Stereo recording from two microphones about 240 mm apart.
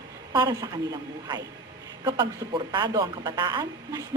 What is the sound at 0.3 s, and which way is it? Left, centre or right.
A woman's voice, centre.